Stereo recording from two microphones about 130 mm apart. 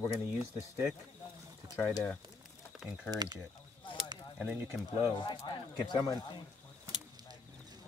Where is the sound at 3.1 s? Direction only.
30° right (ahead or behind).